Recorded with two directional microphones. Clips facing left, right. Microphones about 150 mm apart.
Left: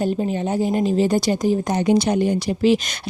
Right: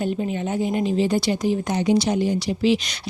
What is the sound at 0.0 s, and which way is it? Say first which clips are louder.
A woman's voice: left 3 dB; 35° left (ahead or behind).